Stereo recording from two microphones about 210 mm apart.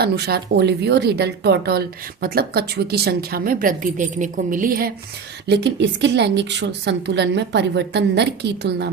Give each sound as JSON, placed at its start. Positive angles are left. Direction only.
{"t": 0.0, "sound": "a woman's voice", "side_deg": -50}
{"t": 5.5, "sound": "a woman's voice", "side_deg": -55}